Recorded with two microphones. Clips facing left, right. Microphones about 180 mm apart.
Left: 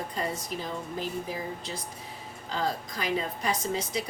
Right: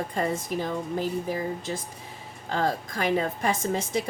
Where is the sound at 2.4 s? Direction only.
55° right (ahead or behind).